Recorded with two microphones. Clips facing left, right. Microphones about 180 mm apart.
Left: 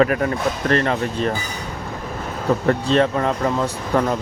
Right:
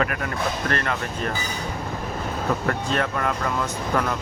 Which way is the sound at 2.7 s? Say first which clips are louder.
Left 7 dB; 30° left (ahead or behind).